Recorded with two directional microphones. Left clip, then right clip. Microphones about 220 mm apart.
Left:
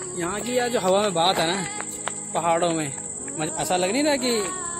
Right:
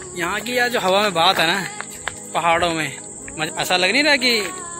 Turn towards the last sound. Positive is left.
turn(degrees=-5)  # may be behind; listen again after turning